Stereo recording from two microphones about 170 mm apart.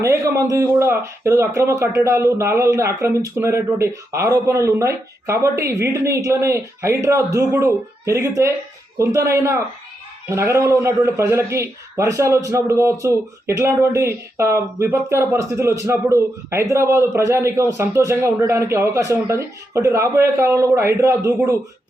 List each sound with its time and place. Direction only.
0.0 s a man's voice: 15° right (ahead or behind)